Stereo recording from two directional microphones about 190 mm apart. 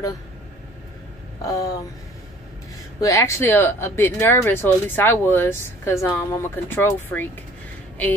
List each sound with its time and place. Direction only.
1.4 s speech: 15° left (ahead or behind)
3.0 s speech: 15° left (ahead or behind)